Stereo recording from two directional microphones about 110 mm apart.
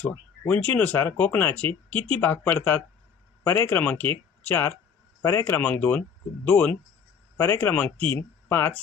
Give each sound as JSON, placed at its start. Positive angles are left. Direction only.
{"t": 0.0, "sound": "speech", "side_deg": 15}